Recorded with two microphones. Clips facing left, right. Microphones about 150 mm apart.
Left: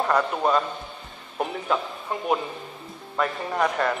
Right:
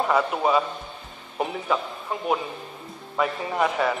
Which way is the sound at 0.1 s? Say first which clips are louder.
Even; 5° right (ahead or behind).